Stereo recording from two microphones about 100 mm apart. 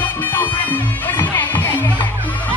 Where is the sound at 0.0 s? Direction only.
20° left (ahead or behind).